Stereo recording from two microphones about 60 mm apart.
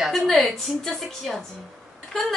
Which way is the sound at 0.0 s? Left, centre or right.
Centre.